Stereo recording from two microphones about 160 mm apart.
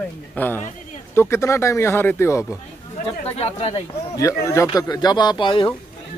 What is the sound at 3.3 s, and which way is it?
Speech, 40° left (ahead or behind).